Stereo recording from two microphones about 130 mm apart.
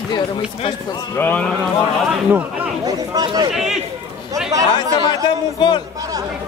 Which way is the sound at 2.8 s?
30° right (ahead or behind).